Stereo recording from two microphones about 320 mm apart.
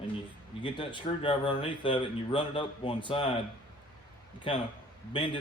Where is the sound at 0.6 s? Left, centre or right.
Centre.